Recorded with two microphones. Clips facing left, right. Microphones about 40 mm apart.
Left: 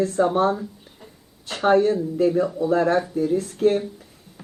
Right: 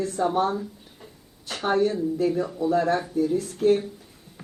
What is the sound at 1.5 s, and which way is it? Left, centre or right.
Speech, left.